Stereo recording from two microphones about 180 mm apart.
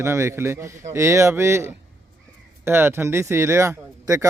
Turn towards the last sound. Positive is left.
turn(degrees=-15)  # may be behind; listen again after turning